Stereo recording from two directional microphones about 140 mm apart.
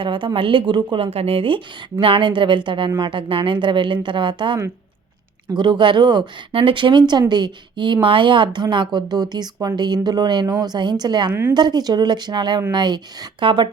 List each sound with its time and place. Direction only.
0.0 s a woman's voice: 35° right (ahead or behind)
11.3 s a woman's voice: 15° right (ahead or behind)
11.5 s a woman's voice: 30° right (ahead or behind)